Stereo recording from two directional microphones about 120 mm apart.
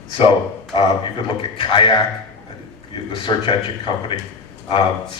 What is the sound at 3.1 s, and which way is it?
A man's voice, 45° left (ahead or behind).